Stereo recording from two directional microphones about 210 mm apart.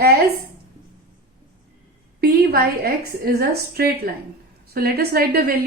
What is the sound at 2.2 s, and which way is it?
A woman's voice, 45° right (ahead or behind).